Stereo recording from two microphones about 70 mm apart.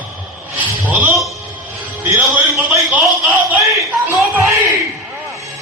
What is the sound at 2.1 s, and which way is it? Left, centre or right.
A man's voice, right.